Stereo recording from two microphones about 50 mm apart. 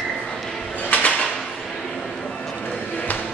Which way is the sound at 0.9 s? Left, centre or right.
Left.